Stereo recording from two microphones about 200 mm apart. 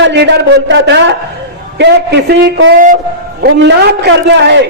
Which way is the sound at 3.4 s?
55° right (ahead or behind).